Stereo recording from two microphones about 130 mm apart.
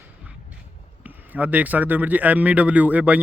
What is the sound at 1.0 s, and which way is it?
Speech, 10° right (ahead or behind).